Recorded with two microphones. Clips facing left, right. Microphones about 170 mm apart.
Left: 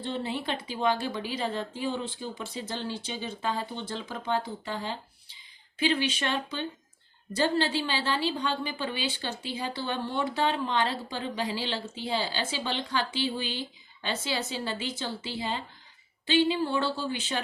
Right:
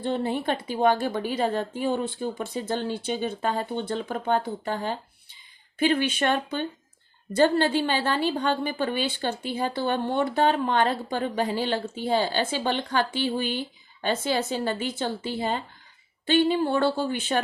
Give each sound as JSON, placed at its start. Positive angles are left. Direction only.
{"t": 0.0, "sound": "a woman's voice", "side_deg": -50}